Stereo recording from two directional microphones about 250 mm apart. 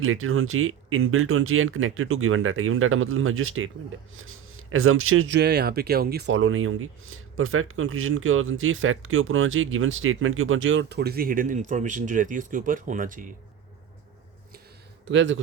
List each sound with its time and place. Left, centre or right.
0.0 s speech: right
15.0 s speech: right